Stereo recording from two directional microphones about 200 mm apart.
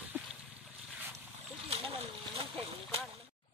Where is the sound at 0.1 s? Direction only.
5° right (ahead or behind).